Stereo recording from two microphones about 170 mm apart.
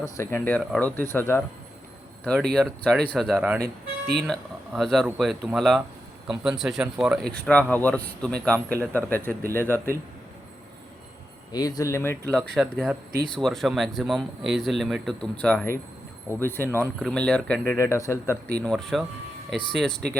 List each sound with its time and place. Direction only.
0.0 s speech: 15° left (ahead or behind)
3.3 s speech: 10° right (ahead or behind)
4.2 s speech: centre (ahead or behind)
11.5 s speech: 20° left (ahead or behind)
12.5 s speech: centre (ahead or behind); by 18.3 s 15° left (ahead or behind)
18.5 s speech: 5° left (ahead or behind)